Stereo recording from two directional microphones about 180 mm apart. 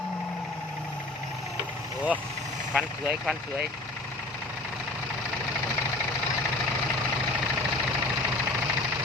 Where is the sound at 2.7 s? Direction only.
5° right (ahead or behind).